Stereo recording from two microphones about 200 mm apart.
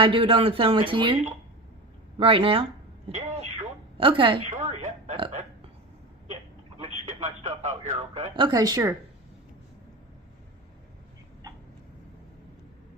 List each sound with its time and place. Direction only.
0.0 s a woman's voice: 25° right (ahead or behind)
6.7 s speech: 35° right (ahead or behind); by 9.0 s 15° right (ahead or behind)
11.4 s a sound: 20° right (ahead or behind)